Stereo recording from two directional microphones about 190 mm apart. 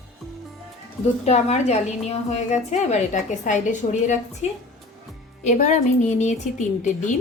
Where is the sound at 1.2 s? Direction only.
35° left (ahead or behind).